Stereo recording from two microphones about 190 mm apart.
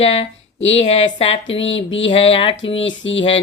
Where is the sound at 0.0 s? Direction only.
30° left (ahead or behind).